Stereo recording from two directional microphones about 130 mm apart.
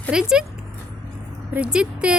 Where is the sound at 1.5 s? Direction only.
5° right (ahead or behind).